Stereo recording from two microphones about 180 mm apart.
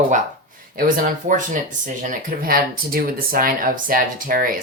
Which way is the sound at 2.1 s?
50° right (ahead or behind).